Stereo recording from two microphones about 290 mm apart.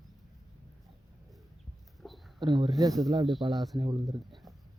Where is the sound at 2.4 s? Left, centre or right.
Centre.